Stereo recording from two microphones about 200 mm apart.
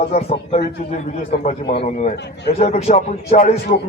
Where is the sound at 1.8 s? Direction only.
35° left (ahead or behind).